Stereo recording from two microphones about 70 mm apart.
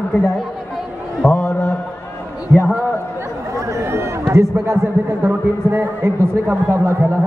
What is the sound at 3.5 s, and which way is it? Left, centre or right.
Chatter, right.